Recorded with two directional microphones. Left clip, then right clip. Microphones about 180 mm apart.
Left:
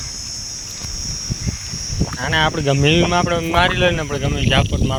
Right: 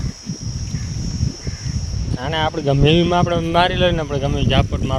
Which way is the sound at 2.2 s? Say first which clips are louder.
Left 2 dB; 15° right (ahead or behind).